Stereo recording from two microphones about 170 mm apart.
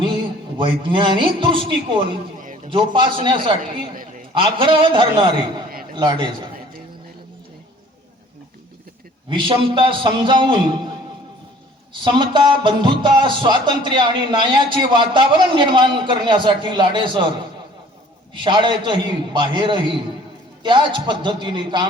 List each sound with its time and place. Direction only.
0.0 s speech: 30° right (ahead or behind)
2.6 s music: 30° right (ahead or behind)
3.9 s a sound: 55° right (ahead or behind)
4.4 s music: 30° right (ahead or behind)
9.3 s music: 30° right (ahead or behind)
12.0 s music: 30° right (ahead or behind)
18.3 s music: 30° right (ahead or behind)